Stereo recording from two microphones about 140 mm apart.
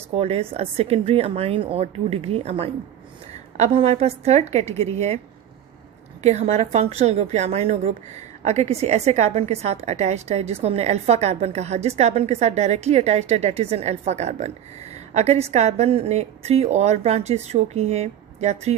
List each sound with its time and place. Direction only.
0.1 s a woman's voice: 45° right (ahead or behind)
6.2 s a woman's voice: 55° right (ahead or behind)